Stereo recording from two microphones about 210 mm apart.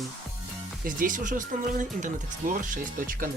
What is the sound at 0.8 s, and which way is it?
Speech, 40° right (ahead or behind).